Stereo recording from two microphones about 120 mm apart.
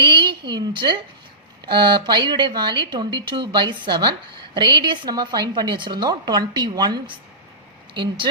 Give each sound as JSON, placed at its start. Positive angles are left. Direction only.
{"t": 0.0, "sound": "speech", "side_deg": -40}